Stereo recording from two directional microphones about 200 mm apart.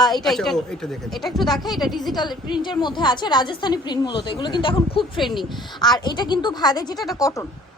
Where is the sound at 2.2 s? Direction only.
20° left (ahead or behind).